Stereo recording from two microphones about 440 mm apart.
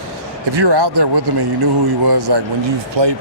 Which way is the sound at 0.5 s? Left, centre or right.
Right.